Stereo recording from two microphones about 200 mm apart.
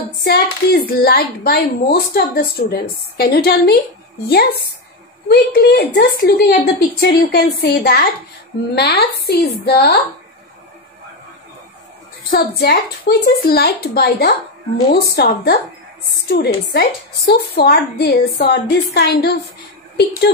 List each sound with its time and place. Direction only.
0.2 s a woman's voice: 50° left (ahead or behind)
5.3 s a woman's voice: 50° left (ahead or behind)
12.3 s a woman's voice: 55° left (ahead or behind)